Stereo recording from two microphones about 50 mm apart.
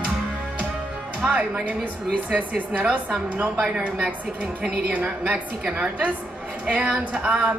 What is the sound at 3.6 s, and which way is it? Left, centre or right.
A woman's voice, centre.